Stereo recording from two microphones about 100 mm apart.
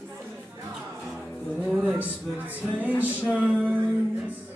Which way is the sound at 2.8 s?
15° right (ahead or behind).